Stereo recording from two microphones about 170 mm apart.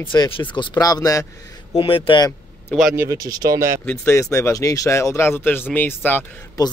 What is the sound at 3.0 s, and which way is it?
Speech, 20° right (ahead or behind).